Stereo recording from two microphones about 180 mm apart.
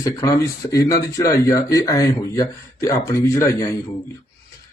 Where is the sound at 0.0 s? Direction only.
20° left (ahead or behind).